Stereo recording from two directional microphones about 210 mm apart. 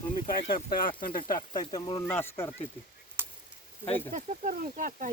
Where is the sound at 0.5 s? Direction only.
45° left (ahead or behind).